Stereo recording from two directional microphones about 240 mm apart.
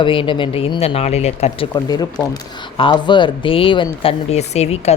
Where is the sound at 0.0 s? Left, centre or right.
Left.